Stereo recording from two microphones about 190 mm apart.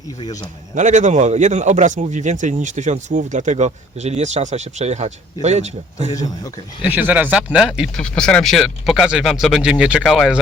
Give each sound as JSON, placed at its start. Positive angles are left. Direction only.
{"t": 0.8, "sound": "speech", "side_deg": -40}
{"t": 6.1, "sound": "speech", "side_deg": 20}
{"t": 6.8, "sound": "speech", "side_deg": -10}